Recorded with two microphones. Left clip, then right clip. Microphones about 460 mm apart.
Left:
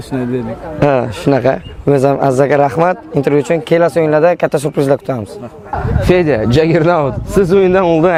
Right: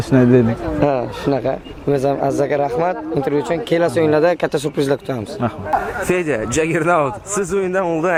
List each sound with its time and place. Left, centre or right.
0.1 s speech: right
0.8 s speech: left
6.1 s a man's voice: left